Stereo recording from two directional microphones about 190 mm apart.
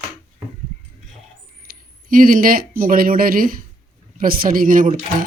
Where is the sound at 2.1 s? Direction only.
45° right (ahead or behind).